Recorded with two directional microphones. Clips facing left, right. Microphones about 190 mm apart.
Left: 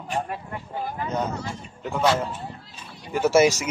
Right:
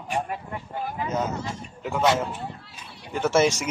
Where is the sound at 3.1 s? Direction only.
5° left (ahead or behind).